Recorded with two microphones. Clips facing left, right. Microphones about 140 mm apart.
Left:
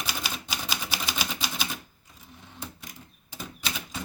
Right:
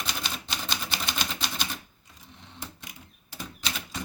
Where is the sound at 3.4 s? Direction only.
5° left (ahead or behind).